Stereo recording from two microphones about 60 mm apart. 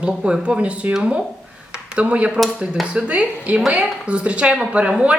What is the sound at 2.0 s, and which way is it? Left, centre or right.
Speech, right.